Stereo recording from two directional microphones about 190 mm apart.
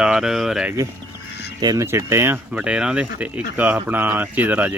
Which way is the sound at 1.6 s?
20° right (ahead or behind).